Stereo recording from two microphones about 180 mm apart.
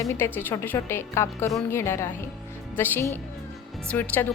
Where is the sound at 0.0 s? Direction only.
15° left (ahead or behind).